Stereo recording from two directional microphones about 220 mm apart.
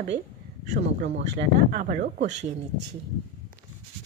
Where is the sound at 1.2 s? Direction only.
50° right (ahead or behind).